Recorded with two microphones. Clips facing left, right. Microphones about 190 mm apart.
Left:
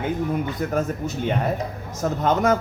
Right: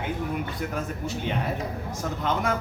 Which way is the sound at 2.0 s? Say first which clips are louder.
Left 8 dB; 45° left (ahead or behind).